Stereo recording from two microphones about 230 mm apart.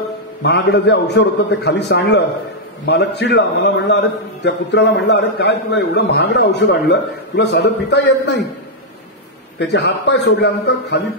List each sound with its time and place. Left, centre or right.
0.4 s a man's voice: left
9.6 s a man's voice: left